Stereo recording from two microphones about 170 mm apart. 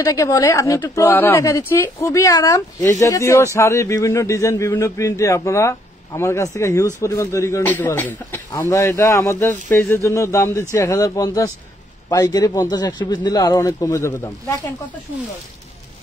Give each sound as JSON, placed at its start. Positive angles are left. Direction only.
{"t": 0.0, "sound": "a man's voice", "side_deg": 20}